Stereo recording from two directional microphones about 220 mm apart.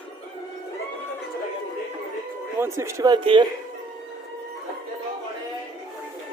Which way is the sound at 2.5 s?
10° right (ahead or behind).